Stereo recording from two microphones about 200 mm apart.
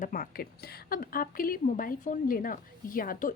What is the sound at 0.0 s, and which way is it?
A woman's voice, 45° left (ahead or behind).